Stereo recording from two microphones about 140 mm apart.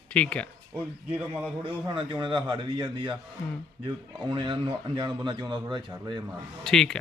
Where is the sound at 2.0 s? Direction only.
35° right (ahead or behind).